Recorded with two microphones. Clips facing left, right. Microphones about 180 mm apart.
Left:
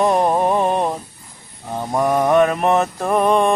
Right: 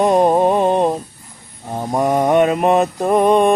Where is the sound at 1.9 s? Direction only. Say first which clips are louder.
Right 1 dB; 20° right (ahead or behind).